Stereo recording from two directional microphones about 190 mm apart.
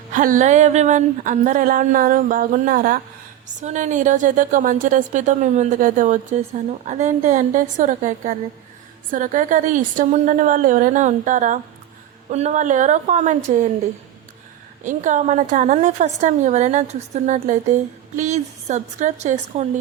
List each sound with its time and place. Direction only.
0.1 s a woman's voice: 40° right (ahead or behind)
14.8 s a woman's voice: 40° right (ahead or behind)